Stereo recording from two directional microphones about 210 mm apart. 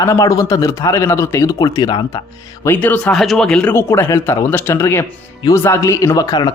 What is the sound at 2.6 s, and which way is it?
A man's voice, 10° left (ahead or behind).